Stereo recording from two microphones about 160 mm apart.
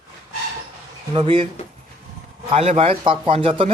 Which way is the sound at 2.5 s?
40° right (ahead or behind).